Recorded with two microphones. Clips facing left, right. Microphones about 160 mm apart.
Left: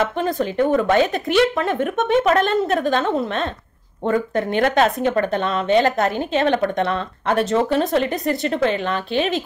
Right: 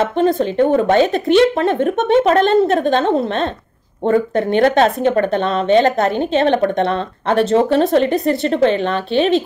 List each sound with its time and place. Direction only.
0.0 s speech: 30° right (ahead or behind)